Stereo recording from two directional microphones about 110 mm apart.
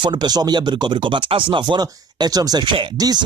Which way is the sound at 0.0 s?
45° right (ahead or behind).